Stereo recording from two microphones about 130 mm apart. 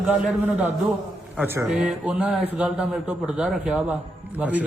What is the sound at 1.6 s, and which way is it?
A man's voice, 5° right (ahead or behind).